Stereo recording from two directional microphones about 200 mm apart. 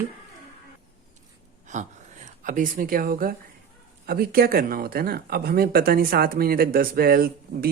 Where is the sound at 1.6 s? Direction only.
35° right (ahead or behind).